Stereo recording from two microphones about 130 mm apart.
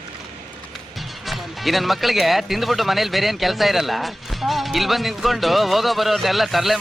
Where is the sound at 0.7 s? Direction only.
Centre (ahead or behind).